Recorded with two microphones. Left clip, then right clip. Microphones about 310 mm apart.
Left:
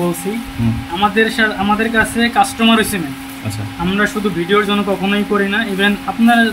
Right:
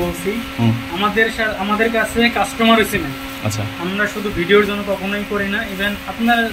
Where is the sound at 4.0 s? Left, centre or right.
Left.